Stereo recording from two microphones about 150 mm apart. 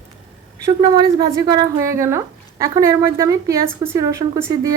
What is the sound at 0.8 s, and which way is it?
A woman's voice, 30° right (ahead or behind).